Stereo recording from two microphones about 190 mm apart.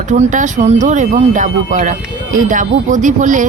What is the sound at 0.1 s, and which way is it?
Speech, 40° right (ahead or behind).